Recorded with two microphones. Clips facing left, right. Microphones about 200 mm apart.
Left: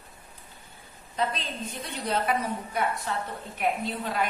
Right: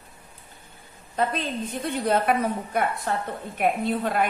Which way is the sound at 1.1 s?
55° right (ahead or behind).